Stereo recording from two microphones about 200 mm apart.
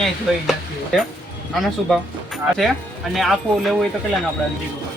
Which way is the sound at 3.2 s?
Centre (ahead or behind).